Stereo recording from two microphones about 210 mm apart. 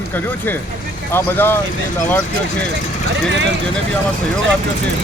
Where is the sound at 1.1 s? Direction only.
10° left (ahead or behind).